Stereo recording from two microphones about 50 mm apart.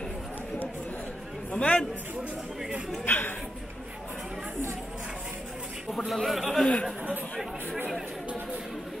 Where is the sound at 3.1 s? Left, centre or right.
Left.